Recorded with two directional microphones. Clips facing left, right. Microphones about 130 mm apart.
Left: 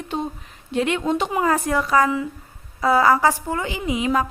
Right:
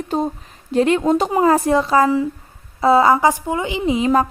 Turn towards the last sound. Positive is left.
turn(degrees=-35)  # may be behind; listen again after turning